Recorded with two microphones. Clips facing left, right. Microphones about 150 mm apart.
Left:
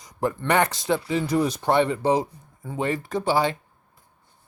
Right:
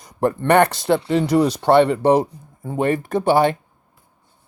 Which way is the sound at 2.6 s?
50° right (ahead or behind).